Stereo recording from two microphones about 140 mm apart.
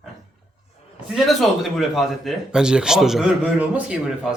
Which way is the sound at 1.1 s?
Centre (ahead or behind).